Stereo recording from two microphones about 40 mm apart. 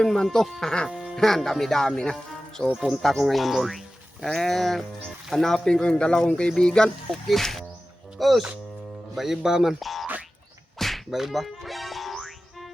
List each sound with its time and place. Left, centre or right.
0.0 s speech: centre
0.9 s music: centre
1.1 s speech: centre
2.7 s speech: centre
5.8 s speech: left
7.1 s speech: centre
9.8 s speech: centre
10.8 s whip: centre
11.1 s speech: centre
11.3 s music: centre